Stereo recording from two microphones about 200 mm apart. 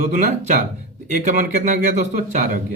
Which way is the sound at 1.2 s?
35° right (ahead or behind).